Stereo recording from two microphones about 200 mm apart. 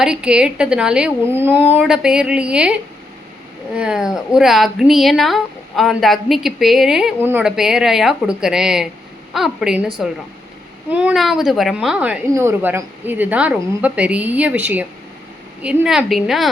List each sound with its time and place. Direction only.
0.0 s speech: 5° right (ahead or behind)
3.8 s speech: 5° right (ahead or behind)
10.9 s speech: 5° right (ahead or behind)